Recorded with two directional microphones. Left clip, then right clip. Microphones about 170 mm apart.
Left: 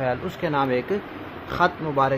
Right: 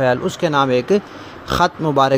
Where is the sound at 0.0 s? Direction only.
45° right (ahead or behind).